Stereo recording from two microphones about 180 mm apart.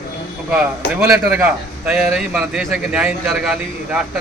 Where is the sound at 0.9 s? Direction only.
5° right (ahead or behind).